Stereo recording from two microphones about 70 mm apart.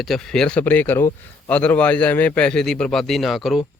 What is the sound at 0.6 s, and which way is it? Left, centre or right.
A man's voice, left.